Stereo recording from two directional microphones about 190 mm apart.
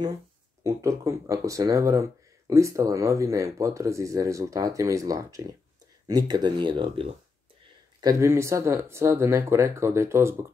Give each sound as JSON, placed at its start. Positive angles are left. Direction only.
{"t": 0.7, "sound": "speech", "side_deg": -15}
{"t": 8.0, "sound": "speech", "side_deg": -15}